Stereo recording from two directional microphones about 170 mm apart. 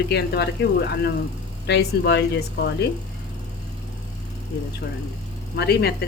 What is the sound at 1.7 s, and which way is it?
Speech, 90° left.